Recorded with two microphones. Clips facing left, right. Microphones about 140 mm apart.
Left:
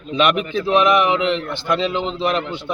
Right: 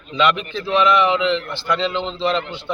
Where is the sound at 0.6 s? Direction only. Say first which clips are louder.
Even; 15° left (ahead or behind).